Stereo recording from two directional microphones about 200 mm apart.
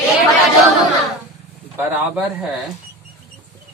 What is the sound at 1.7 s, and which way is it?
Speech, 5° right (ahead or behind).